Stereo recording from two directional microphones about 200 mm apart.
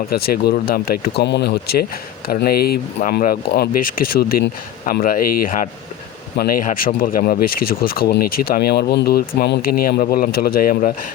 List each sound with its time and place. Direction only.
0.1 s speech: 50° left (ahead or behind)